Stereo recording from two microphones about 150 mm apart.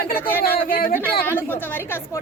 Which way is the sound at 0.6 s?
70° left (ahead or behind).